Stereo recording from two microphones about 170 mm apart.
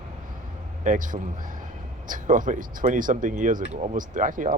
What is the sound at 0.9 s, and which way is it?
Speech, 50° right (ahead or behind).